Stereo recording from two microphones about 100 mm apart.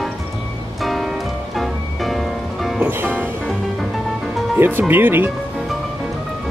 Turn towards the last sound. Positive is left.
turn(degrees=-20)  # may be behind; listen again after turning